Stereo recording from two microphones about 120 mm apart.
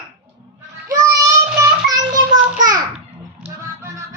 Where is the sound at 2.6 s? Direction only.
35° right (ahead or behind).